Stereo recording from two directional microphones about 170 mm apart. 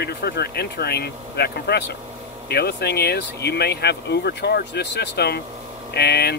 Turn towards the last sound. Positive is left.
turn(degrees=70)  # may be behind; listen again after turning